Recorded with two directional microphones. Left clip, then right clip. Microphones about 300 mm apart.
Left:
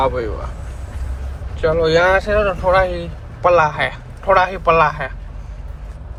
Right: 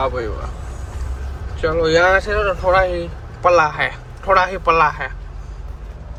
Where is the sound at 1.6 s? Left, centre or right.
Centre.